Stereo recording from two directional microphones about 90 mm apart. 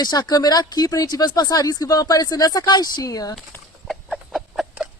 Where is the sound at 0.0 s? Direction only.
50° left (ahead or behind).